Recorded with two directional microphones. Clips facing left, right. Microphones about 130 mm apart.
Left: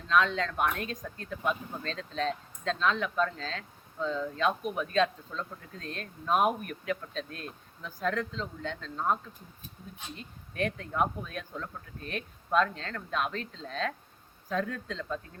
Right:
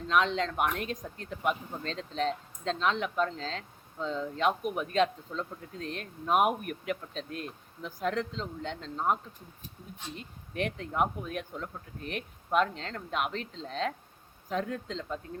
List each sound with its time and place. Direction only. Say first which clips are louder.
0.1 s speech: left 1 dB; 20° right (ahead or behind)
10.5 s speech: even; 20° right (ahead or behind)